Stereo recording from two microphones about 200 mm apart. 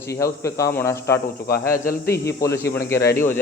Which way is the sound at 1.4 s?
50° left (ahead or behind).